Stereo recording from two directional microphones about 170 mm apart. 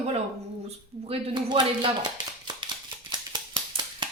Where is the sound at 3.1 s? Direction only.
25° right (ahead or behind).